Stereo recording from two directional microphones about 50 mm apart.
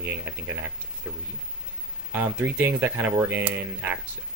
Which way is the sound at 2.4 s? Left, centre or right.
Right.